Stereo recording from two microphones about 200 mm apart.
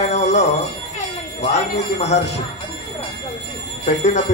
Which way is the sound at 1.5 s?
35° left (ahead or behind).